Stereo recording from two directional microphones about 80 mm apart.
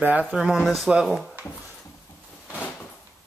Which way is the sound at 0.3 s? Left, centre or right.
Centre.